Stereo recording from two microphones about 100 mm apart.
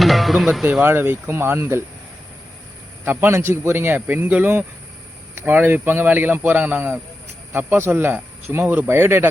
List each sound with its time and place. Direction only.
0.0 s music: centre (ahead or behind)
0.6 s speech: 20° right (ahead or behind)
3.0 s speech: 20° right (ahead or behind)